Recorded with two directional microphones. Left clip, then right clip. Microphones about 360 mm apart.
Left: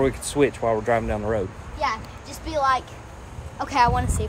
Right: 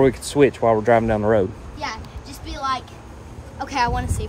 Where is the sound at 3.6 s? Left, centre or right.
Centre.